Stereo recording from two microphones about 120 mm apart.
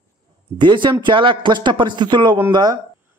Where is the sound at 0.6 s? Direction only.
40° right (ahead or behind).